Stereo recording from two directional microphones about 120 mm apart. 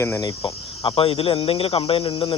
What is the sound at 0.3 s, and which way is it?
Speech, 45° left (ahead or behind).